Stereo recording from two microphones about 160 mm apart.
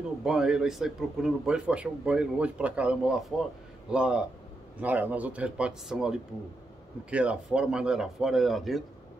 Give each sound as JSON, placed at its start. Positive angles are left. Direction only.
{"t": 0.2, "sound": "a man's voice", "side_deg": -5}